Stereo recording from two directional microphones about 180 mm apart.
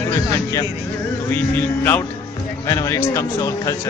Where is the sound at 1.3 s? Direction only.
10° left (ahead or behind).